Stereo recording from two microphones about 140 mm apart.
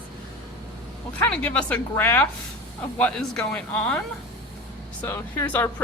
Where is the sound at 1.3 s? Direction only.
10° left (ahead or behind).